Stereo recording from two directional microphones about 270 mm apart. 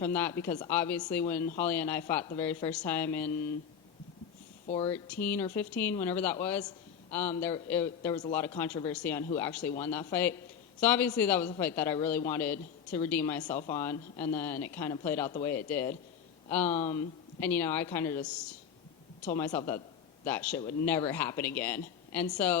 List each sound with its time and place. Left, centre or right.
0.0 s speech: centre
4.6 s speech: left
4.9 s speech: centre